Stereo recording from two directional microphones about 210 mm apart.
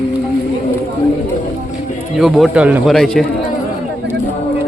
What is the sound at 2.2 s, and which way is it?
Speech, centre (ahead or behind).